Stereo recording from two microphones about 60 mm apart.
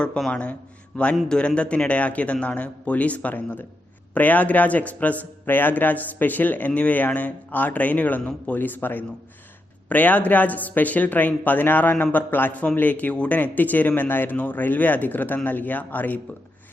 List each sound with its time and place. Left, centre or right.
0.3 s a man's voice: left